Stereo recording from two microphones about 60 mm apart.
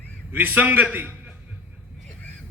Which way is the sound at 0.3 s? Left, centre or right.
Right.